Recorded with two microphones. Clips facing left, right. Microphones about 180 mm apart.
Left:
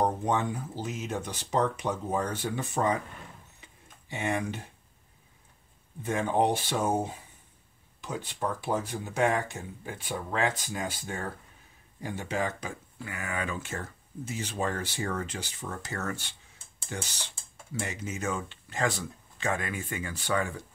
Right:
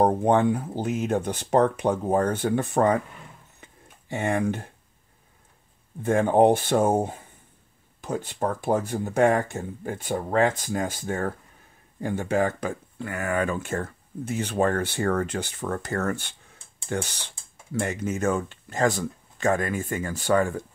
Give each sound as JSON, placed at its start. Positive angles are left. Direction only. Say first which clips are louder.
{"t": 0.0, "sound": "speech", "louder": "right 8 dB", "side_deg": -60}
{"t": 3.6, "sound": "a sound", "louder": "right 6 dB", "side_deg": -50}
{"t": 6.0, "sound": "speech", "louder": "right 8 dB", "side_deg": -50}